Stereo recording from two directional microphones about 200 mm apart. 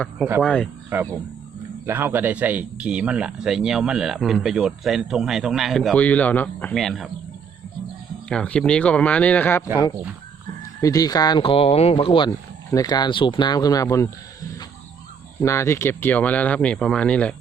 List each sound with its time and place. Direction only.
0.4 s speech: 5° left (ahead or behind)
0.9 s speech: 10° right (ahead or behind)
8.3 s speech: 5° left (ahead or behind)
10.8 s speech: 15° left (ahead or behind)
15.4 s speech: 15° left (ahead or behind)